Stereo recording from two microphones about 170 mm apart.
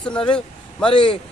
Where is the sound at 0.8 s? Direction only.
30° left (ahead or behind).